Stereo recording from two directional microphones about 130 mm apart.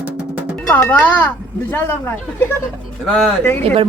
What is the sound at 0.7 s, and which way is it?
Speech, 10° left (ahead or behind).